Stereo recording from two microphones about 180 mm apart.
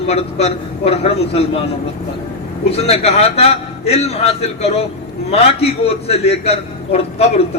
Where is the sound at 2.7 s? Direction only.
35° left (ahead or behind).